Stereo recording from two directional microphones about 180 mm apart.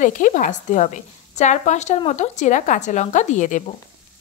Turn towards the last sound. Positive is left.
turn(degrees=45)  # may be behind; listen again after turning